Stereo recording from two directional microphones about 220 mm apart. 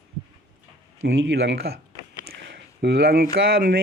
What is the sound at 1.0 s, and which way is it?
Speech, 55° right (ahead or behind).